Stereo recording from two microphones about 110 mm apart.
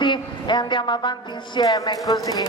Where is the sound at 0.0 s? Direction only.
45° left (ahead or behind).